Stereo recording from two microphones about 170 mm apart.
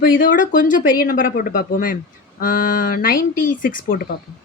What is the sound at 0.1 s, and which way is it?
Speech, 50° left (ahead or behind).